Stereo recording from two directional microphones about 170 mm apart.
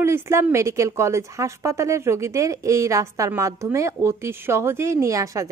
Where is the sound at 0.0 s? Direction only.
15° right (ahead or behind).